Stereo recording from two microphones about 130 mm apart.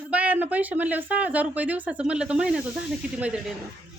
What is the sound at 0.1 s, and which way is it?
Speech, 10° right (ahead or behind).